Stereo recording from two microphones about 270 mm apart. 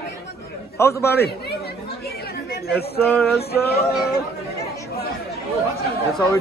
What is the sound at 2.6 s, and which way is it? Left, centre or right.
Speech, left.